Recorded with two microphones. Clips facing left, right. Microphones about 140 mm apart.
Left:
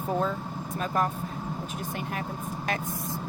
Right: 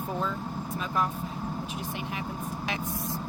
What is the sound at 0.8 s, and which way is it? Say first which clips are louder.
Speech: left 3 dB; 45° left (ahead or behind).